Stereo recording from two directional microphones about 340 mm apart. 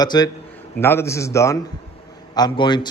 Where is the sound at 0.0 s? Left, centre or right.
Centre.